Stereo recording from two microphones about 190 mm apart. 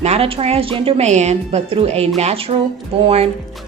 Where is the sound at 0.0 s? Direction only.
30° right (ahead or behind).